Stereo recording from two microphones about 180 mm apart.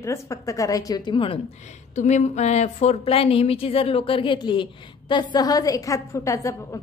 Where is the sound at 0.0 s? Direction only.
15° left (ahead or behind).